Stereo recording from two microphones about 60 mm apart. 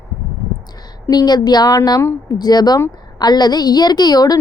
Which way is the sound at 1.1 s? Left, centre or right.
Left.